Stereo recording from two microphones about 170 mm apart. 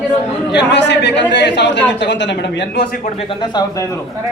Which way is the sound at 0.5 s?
90° left.